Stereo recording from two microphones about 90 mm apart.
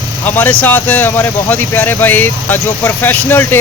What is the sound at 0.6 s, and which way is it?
Speech, 20° left (ahead or behind).